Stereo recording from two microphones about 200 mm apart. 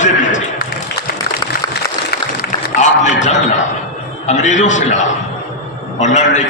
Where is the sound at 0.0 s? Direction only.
35° left (ahead or behind).